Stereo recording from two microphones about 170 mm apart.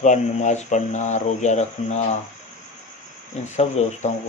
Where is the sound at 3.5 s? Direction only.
40° left (ahead or behind).